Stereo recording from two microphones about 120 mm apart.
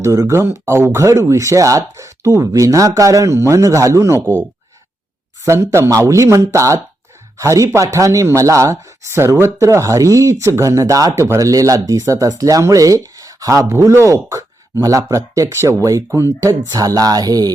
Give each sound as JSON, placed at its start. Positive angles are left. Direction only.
{"t": 0.0, "sound": "speech", "side_deg": -25}
{"t": 5.5, "sound": "speech", "side_deg": -20}